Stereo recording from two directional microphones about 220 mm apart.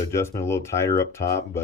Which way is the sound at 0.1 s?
10° left (ahead or behind).